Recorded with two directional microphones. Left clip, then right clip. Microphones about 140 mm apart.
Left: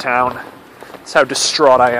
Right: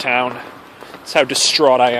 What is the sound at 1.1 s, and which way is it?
Speech, 40° right (ahead or behind).